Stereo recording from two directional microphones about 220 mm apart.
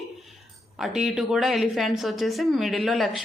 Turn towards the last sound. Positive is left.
turn(degrees=0)  # may be behind; listen again after turning